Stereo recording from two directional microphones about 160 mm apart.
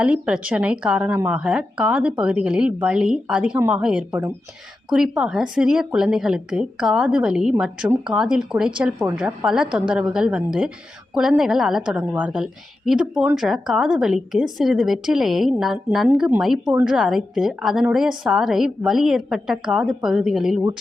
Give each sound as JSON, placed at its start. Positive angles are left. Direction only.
{"t": 0.0, "sound": "a woman's voice", "side_deg": -5}